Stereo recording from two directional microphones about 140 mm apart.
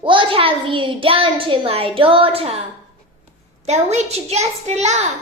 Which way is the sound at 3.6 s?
50° right (ahead or behind).